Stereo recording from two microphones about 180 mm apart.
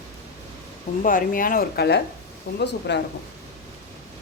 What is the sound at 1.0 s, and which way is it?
A woman's voice, 50° left (ahead or behind).